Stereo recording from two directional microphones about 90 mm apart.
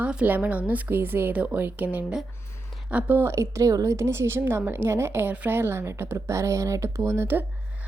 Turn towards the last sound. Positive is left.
turn(degrees=-25)  # may be behind; listen again after turning